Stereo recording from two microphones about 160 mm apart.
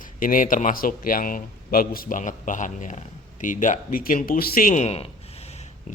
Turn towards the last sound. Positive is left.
turn(degrees=40)  # may be behind; listen again after turning